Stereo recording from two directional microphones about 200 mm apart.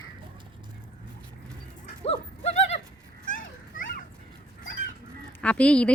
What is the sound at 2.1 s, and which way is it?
Horse, 35° left (ahead or behind).